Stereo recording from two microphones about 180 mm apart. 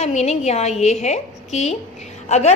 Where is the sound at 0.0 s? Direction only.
35° left (ahead or behind).